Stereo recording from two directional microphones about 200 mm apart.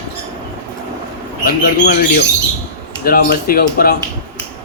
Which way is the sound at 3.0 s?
50° left (ahead or behind).